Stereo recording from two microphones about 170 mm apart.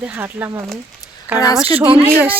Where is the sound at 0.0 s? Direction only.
10° right (ahead or behind).